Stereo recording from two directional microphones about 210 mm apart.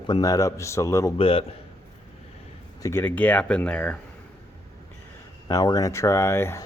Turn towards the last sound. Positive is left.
turn(degrees=10)  # may be behind; listen again after turning